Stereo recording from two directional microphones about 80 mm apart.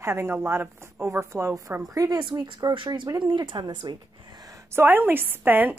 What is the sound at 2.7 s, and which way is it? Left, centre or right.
A woman's voice, right.